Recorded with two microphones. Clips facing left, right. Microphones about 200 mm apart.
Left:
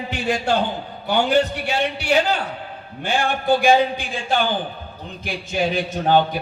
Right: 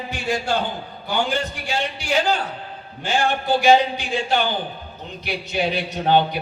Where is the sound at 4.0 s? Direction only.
50° left (ahead or behind).